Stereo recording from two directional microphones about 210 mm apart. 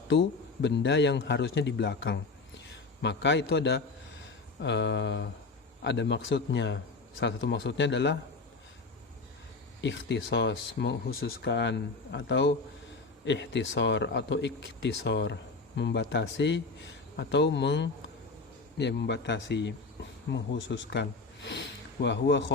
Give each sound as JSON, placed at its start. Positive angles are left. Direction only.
{"t": 0.1, "sound": "speech", "side_deg": 55}
{"t": 9.8, "sound": "speech", "side_deg": 55}